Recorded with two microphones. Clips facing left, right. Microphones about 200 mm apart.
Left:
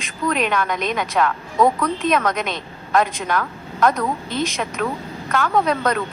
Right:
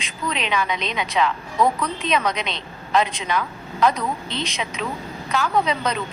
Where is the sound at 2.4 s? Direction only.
50° left (ahead or behind).